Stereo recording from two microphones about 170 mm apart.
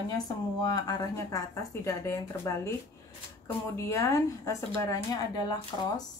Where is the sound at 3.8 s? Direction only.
20° left (ahead or behind).